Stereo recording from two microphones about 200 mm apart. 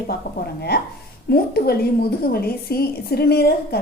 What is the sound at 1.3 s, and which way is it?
A woman's voice, 50° left (ahead or behind).